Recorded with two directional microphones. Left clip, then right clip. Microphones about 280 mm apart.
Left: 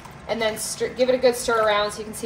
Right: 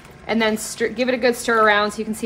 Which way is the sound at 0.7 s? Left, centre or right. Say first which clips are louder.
Even; right.